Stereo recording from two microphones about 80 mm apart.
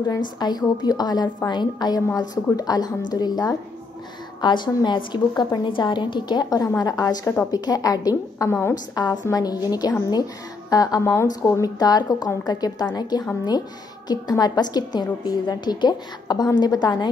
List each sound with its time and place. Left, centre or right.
0.2 s a woman's voice: left
4.4 s a woman's voice: left
8.5 s a woman's voice: left
8.9 s a woman's voice: left